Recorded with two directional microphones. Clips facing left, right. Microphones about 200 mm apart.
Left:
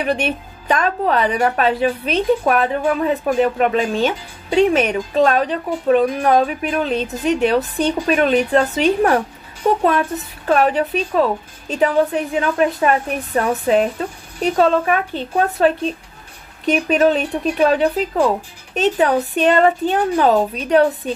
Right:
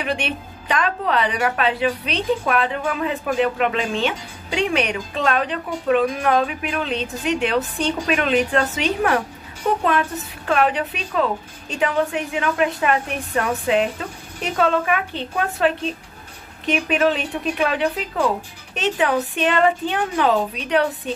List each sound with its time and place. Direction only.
0.0 s a woman's voice: 40° left (ahead or behind)